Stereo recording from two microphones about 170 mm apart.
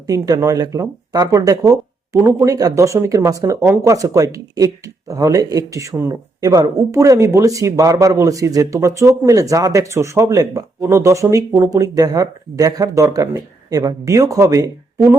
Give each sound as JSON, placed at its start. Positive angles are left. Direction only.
{"t": 0.1, "sound": "speech", "side_deg": -20}